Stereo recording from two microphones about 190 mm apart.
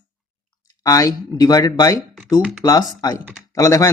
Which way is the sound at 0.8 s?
20° left (ahead or behind).